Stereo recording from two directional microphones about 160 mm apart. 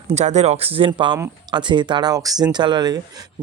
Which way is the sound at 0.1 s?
45° right (ahead or behind).